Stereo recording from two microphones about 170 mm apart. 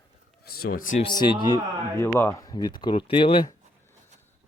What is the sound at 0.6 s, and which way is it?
Speech, 55° left (ahead or behind).